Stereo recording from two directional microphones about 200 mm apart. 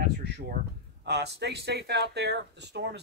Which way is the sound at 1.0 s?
55° right (ahead or behind).